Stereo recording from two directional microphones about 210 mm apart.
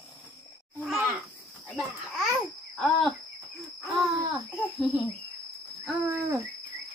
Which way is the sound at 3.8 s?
Centre (ahead or behind).